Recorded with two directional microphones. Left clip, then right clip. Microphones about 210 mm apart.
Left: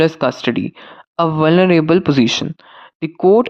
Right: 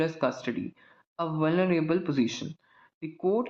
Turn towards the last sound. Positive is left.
turn(degrees=50)  # may be behind; listen again after turning